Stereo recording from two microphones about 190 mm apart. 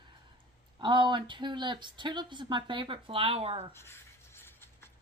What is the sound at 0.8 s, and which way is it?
Speech, 25° right (ahead or behind).